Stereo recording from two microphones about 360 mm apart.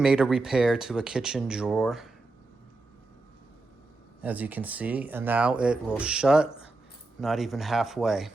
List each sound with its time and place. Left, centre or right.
0.0 s speech: centre
4.2 s speech: centre